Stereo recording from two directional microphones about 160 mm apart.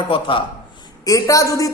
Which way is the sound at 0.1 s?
30° left (ahead or behind).